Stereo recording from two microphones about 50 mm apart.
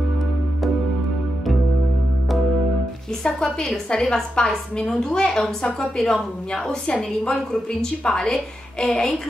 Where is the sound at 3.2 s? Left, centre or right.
Centre.